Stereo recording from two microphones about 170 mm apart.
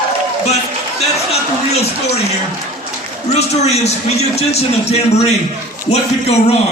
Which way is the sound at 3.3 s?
40° left (ahead or behind).